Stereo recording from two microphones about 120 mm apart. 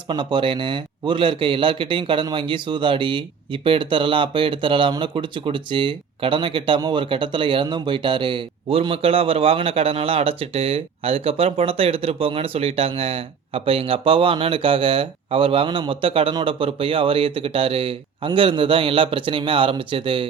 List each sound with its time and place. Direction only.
0.1 s a man's voice: 40° right (ahead or behind)